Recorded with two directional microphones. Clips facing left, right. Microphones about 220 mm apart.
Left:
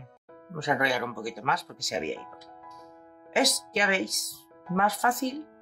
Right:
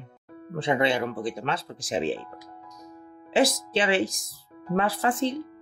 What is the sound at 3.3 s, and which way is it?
Speech, 30° right (ahead or behind).